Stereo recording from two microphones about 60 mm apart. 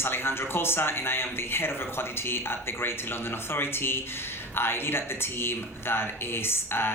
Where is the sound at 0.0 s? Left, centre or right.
Left.